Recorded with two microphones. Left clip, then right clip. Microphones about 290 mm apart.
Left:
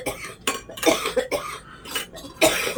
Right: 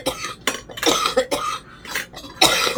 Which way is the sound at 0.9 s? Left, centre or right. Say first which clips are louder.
Right 3 dB; right.